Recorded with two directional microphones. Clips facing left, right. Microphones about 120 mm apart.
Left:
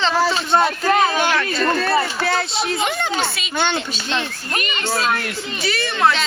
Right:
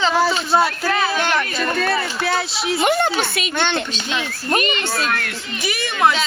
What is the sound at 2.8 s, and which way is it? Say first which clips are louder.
Speech: right 4 dB; 50° right (ahead or behind).